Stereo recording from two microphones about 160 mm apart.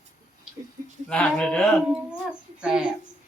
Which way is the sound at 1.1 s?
5° left (ahead or behind).